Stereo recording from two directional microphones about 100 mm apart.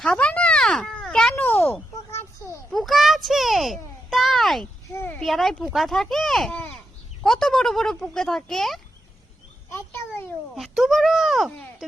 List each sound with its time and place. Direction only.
0.0 s a sound: 10° left (ahead or behind)
1.4 s speech: 20° left (ahead or behind)
2.7 s a child's voice: centre (ahead or behind)
4.9 s a sound: 20° left (ahead or behind)
5.2 s speech: centre (ahead or behind)
10.5 s speech: centre (ahead or behind)